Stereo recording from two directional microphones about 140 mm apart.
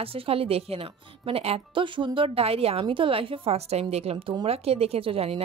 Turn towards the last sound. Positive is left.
turn(degrees=-45)  # may be behind; listen again after turning